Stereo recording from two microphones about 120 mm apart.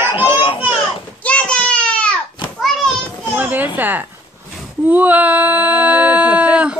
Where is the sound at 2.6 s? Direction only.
Centre (ahead or behind).